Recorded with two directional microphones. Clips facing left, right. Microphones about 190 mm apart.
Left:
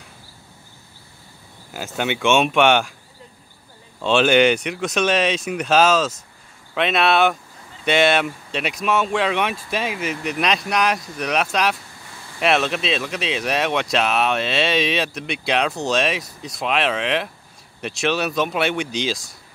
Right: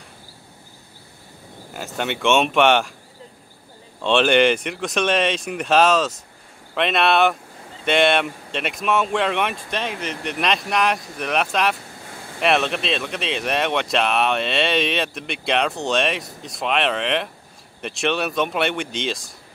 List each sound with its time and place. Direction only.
1.7 s speech: centre (ahead or behind)
4.0 s speech: centre (ahead or behind)
12.1 s vehicle: 55° right (ahead or behind)
12.4 s speech: centre (ahead or behind)